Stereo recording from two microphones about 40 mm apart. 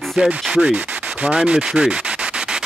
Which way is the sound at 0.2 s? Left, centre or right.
Right.